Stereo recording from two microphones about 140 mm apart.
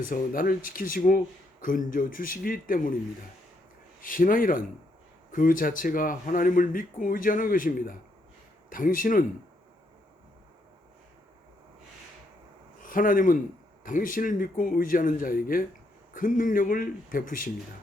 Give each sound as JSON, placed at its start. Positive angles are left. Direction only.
{"t": 0.1, "sound": "speech", "side_deg": 80}
{"t": 4.0, "sound": "speech", "side_deg": 85}
{"t": 12.8, "sound": "speech", "side_deg": 75}